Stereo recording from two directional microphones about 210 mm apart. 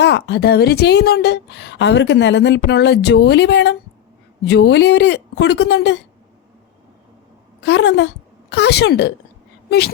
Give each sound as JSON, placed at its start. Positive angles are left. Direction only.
{"t": 0.0, "sound": "a woman's voice", "side_deg": 50}
{"t": 7.6, "sound": "a woman's voice", "side_deg": 55}